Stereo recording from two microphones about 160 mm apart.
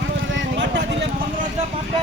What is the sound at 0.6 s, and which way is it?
Vehicle, 90° right.